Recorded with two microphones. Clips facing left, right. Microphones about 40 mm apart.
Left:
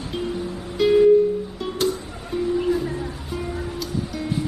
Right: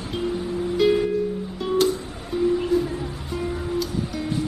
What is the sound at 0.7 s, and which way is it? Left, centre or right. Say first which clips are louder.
Music: left 6 dB; centre.